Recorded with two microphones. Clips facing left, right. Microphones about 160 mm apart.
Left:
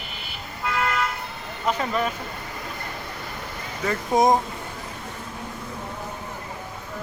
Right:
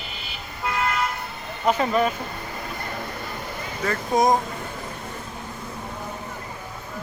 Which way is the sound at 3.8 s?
25° left (ahead or behind).